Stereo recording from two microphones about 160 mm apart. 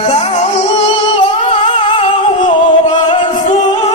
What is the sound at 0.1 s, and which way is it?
Music, 40° left (ahead or behind).